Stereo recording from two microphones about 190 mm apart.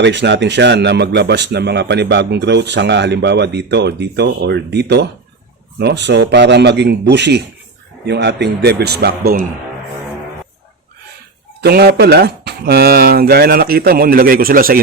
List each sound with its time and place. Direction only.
0.0 s speech: 65° right (ahead or behind); by 9.5 s 50° right (ahead or behind)
11.6 s speech: 55° right (ahead or behind)